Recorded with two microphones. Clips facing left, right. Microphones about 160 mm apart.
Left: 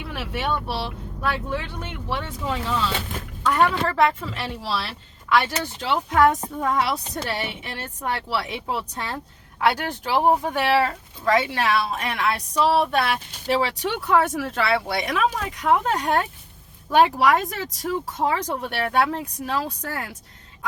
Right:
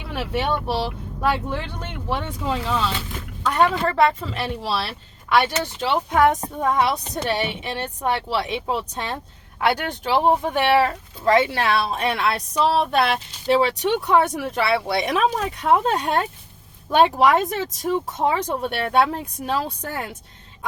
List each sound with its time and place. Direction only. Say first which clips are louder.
0.3 s speech: right 3 dB; 25° right (ahead or behind)
3.9 s speech: right 2 dB; 20° right (ahead or behind)